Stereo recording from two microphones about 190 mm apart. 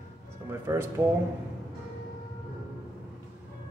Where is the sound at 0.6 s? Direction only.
10° right (ahead or behind).